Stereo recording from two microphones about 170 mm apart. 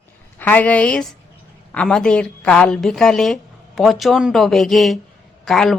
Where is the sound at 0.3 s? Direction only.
10° left (ahead or behind).